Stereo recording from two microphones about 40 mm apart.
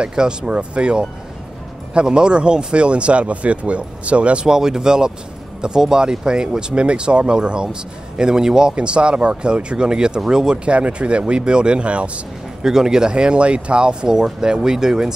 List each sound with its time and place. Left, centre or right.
0.0 s speech: right
4.5 s speech: centre
12.6 s speech: centre